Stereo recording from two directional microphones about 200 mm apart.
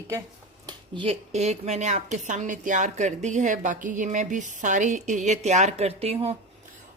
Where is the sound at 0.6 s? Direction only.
25° right (ahead or behind).